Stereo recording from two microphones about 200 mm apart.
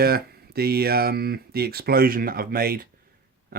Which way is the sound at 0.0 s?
50° right (ahead or behind).